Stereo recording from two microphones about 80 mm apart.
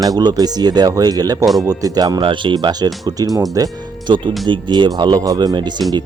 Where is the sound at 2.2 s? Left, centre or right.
Right.